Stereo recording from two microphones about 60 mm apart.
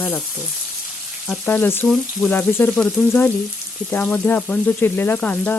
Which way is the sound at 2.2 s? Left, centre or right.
Centre.